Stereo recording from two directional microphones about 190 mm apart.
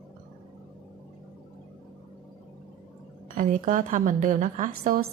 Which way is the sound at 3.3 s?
45° right (ahead or behind).